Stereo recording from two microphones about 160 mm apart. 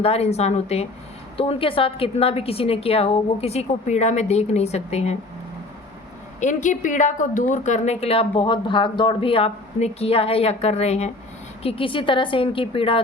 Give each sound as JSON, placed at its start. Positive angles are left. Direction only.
{"t": 0.0, "sound": "a woman's voice", "side_deg": 40}
{"t": 6.4, "sound": "a woman's voice", "side_deg": 50}